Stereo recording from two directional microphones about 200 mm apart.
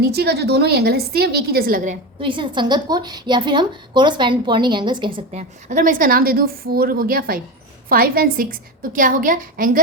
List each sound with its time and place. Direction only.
0.0 s a woman's voice: 55° right (ahead or behind)
2.2 s a woman's voice: 25° right (ahead or behind); by 9.8 s 45° right (ahead or behind)